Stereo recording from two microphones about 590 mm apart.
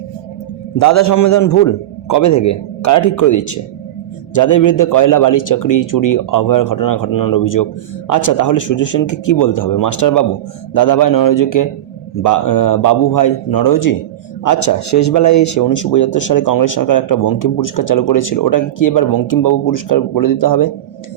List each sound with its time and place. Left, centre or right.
0.8 s a man's voice: left